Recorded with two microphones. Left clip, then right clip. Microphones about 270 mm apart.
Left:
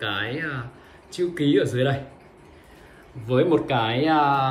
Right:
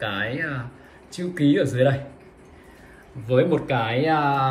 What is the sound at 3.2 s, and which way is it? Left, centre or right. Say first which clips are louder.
Speech: even; centre.